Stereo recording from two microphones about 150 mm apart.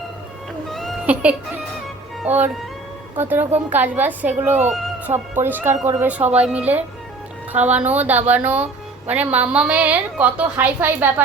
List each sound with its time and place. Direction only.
0.7 s cat: centre (ahead or behind)
1.0 s a woman's voice: 10° right (ahead or behind)